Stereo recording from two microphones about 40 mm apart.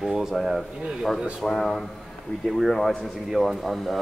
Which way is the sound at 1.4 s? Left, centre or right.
Centre.